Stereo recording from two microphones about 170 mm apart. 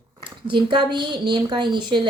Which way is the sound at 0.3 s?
30° right (ahead or behind).